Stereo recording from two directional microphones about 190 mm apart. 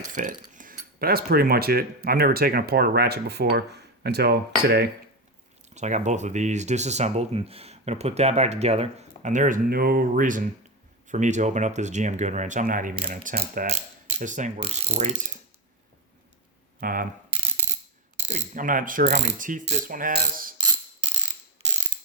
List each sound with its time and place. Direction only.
0.1 s speech: 45° right (ahead or behind)
5.7 s speech: 40° right (ahead or behind)
16.8 s speech: 50° right (ahead or behind)
18.3 s speech: 40° right (ahead or behind)
19.5 s speech: 40° right (ahead or behind)